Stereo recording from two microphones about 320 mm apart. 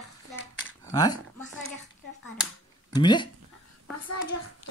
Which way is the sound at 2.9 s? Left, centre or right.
Centre.